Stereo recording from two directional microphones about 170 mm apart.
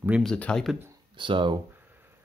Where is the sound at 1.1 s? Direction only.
30° right (ahead or behind).